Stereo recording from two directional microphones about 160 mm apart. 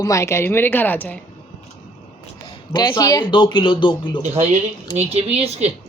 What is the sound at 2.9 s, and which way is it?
Speech, 20° left (ahead or behind).